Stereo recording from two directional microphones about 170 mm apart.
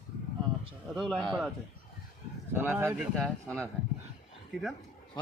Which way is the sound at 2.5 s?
10° right (ahead or behind).